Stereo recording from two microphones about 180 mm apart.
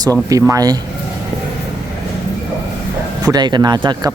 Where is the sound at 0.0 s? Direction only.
20° right (ahead or behind).